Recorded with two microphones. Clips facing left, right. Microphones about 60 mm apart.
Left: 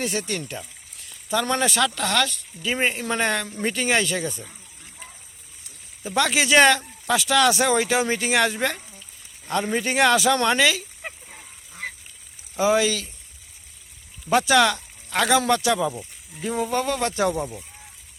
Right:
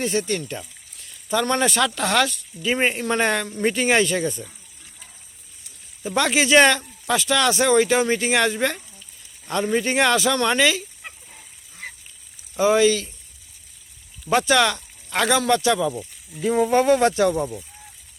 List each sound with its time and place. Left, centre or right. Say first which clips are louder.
0.0 s speech: right 4 dB; centre
2.0 s speech: right 3 dB; centre
6.0 s speech: right 1 dB; centre
12.5 s speech: right 3 dB; centre
14.3 s speech: even; centre
16.5 s speech: right 6 dB; right
17.2 s speech: right 3 dB; centre